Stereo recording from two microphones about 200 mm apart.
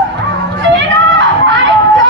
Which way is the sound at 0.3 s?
65° right (ahead or behind).